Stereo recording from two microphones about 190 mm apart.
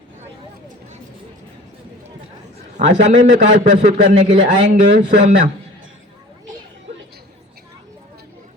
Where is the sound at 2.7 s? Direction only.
40° right (ahead or behind).